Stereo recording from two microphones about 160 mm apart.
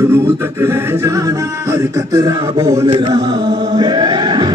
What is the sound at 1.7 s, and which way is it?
Speech, 20° right (ahead or behind).